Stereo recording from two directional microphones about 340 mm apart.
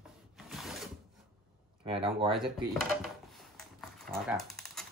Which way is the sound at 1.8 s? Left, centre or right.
Centre.